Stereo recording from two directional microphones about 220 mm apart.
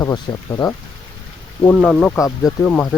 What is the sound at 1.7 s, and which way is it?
Speech, centre (ahead or behind).